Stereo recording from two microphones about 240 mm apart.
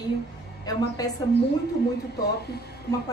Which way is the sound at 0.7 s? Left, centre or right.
Centre.